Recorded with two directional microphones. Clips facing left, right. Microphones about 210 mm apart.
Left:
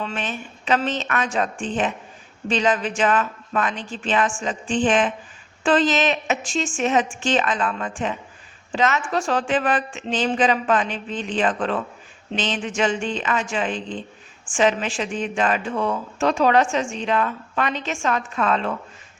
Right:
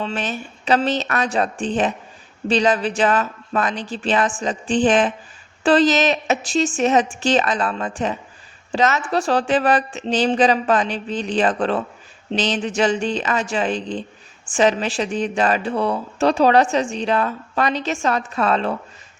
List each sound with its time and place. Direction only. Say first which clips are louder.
0.0 s speech: right 3 dB; 35° right (ahead or behind)